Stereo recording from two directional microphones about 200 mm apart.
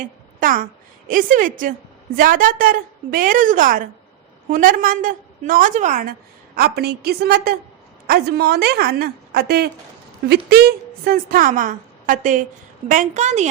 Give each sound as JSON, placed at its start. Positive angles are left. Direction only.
{"t": 0.3, "sound": "a woman's voice", "side_deg": -45}
{"t": 6.6, "sound": "a woman's voice", "side_deg": -50}